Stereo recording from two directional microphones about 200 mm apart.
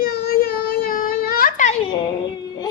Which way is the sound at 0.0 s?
50° left (ahead or behind).